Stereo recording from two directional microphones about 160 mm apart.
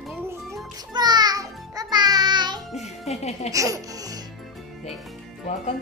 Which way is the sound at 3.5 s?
20° right (ahead or behind).